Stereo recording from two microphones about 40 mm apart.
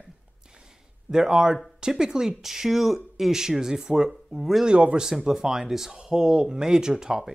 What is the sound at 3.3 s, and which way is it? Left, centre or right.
Speech, centre.